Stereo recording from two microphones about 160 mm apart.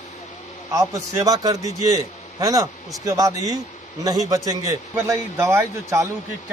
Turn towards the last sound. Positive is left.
turn(degrees=-15)  # may be behind; listen again after turning